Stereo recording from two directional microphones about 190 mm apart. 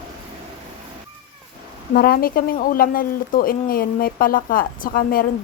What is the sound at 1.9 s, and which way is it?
Speech, 50° left (ahead or behind).